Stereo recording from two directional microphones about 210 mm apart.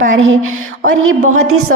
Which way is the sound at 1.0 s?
80° right.